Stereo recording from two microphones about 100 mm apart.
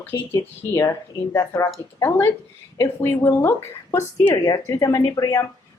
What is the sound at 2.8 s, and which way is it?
A woman's voice, 25° left (ahead or behind).